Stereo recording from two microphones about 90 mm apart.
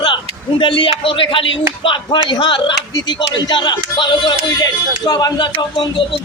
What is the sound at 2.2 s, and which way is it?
Speech, 65° left (ahead or behind).